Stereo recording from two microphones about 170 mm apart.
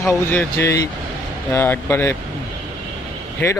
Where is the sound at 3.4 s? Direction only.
10° left (ahead or behind).